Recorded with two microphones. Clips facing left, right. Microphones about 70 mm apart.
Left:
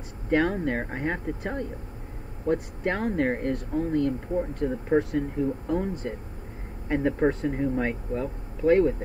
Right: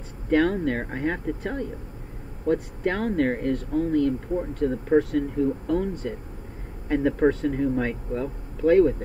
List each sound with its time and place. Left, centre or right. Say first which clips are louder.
0.3 s speech: right 2 dB; centre
4.3 s speech: right 2 dB; centre; by 8.9 s left